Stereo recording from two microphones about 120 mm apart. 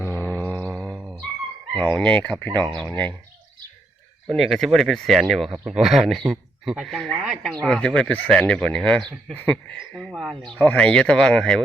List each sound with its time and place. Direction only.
0.0 s a sound: 15° left (ahead or behind)
0.9 s a sound: 5° right (ahead or behind)
1.8 s speech: 10° left (ahead or behind)
2.5 s speech: 40° right (ahead or behind)
2.8 s speech: 15° left (ahead or behind)
4.4 s speech: centre (ahead or behind)
9.9 s speech: 5° left (ahead or behind)
10.4 s speech: 10° left (ahead or behind)